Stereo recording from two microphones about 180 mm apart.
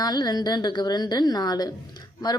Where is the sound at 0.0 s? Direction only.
20° left (ahead or behind).